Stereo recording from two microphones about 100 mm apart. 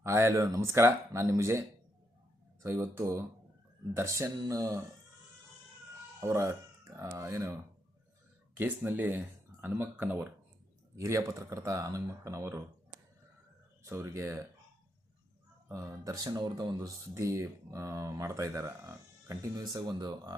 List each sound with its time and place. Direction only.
0.0 s speech: 25° right (ahead or behind)
2.6 s speech: 30° right (ahead or behind)
6.1 s speech: 30° right (ahead or behind)
10.9 s speech: 30° right (ahead or behind)
13.8 s speech: 30° right (ahead or behind)
15.7 s speech: 35° right (ahead or behind)